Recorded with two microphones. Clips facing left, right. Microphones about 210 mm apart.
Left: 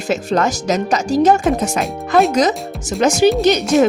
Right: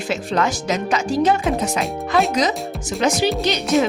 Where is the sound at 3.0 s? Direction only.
45° left (ahead or behind).